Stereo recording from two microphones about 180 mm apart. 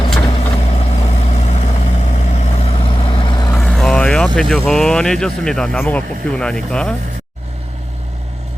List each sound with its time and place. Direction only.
0.3 s vehicle: 30° left (ahead or behind)
3.6 s vehicle: 5° left (ahead or behind)
4.4 s speech: 5° left (ahead or behind)